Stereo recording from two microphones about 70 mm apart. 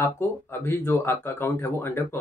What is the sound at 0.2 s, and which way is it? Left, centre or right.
Speech, left.